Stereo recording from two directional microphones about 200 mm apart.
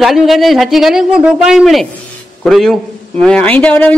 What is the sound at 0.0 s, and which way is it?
A man's voice, centre (ahead or behind).